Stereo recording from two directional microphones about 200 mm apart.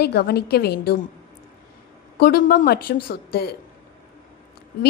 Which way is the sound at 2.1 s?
50° left (ahead or behind).